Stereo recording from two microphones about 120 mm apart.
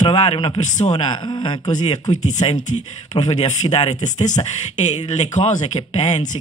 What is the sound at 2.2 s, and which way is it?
Speech, 75° left (ahead or behind).